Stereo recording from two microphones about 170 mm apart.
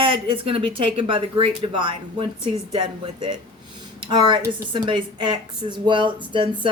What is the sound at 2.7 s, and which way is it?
A woman's voice, 25° right (ahead or behind).